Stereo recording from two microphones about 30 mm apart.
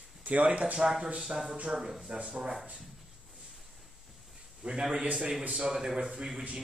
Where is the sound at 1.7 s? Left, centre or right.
Centre.